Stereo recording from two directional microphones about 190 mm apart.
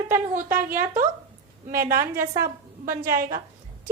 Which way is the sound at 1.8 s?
45° right (ahead or behind).